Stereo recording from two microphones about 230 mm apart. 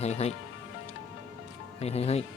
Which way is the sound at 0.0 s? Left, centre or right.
Left.